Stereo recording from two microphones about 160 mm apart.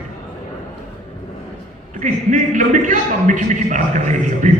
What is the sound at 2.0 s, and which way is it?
A man's voice, 50° right (ahead or behind).